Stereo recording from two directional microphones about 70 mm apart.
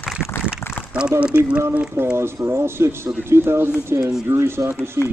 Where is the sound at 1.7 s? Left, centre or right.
Right.